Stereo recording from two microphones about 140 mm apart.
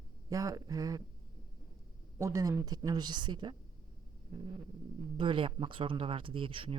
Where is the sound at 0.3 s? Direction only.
25° right (ahead or behind).